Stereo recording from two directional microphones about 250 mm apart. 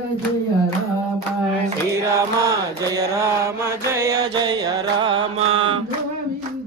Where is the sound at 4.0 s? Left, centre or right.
Centre.